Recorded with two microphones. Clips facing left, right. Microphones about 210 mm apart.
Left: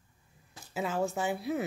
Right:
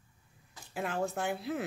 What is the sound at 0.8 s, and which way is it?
Speech, centre (ahead or behind).